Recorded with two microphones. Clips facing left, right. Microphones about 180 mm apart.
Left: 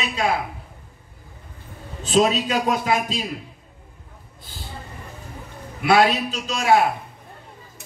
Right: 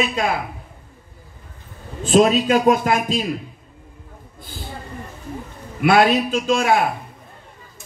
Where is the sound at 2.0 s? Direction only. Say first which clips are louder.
Right 4 dB; 50° right (ahead or behind).